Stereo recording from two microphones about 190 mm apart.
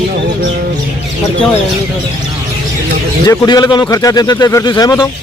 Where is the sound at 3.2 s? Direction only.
20° left (ahead or behind).